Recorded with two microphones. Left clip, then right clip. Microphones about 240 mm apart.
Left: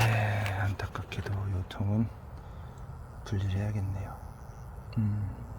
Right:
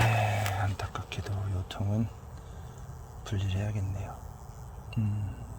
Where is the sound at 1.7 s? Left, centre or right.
Centre.